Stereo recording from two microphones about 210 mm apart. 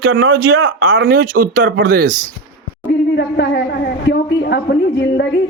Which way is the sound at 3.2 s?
50° left (ahead or behind).